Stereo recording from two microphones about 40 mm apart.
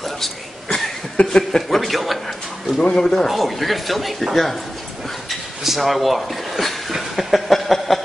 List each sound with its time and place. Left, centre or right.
0.7 s a sound: centre
1.2 s speech: centre
1.7 s speech: centre
2.8 s speech: left
3.3 s speech: centre
5.6 s a sound: centre